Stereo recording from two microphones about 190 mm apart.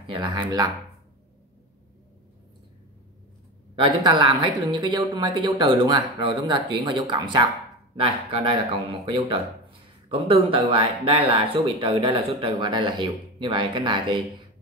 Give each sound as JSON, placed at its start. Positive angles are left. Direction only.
{"t": 0.0, "sound": "speech", "side_deg": -25}
{"t": 3.7, "sound": "speech", "side_deg": -25}